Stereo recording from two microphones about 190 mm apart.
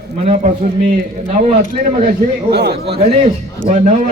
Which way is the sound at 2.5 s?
60° right (ahead or behind).